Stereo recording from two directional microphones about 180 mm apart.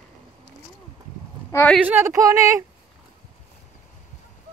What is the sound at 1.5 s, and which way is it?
Speech, 10° left (ahead or behind).